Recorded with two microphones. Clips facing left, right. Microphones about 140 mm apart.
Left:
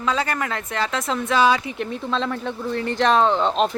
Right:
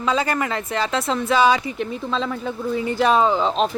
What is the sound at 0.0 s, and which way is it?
Speech, centre (ahead or behind).